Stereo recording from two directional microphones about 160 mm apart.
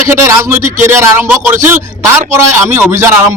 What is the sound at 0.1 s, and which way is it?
Speech, 20° right (ahead or behind).